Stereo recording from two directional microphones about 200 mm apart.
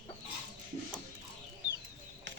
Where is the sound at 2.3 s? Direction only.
65° right (ahead or behind).